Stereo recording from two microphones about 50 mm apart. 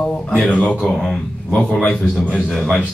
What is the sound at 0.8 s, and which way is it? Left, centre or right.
Speech, centre.